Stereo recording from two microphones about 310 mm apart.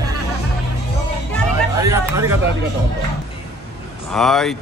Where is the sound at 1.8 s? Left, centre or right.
Centre.